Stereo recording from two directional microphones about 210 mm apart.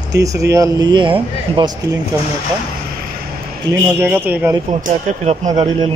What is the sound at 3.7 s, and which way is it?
Speech, 10° right (ahead or behind).